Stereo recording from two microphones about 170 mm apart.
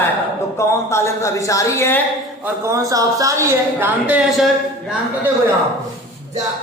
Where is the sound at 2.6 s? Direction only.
20° right (ahead or behind); by 4.5 s 5° right (ahead or behind).